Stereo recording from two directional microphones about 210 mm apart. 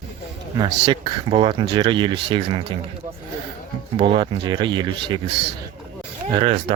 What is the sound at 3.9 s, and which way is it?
Speech, 20° right (ahead or behind).